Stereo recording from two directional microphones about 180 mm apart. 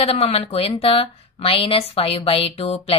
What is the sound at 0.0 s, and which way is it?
A woman's voice, 35° left (ahead or behind).